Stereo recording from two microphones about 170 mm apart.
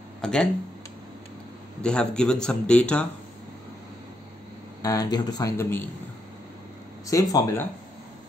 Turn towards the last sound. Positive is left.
turn(degrees=20)  # may be behind; listen again after turning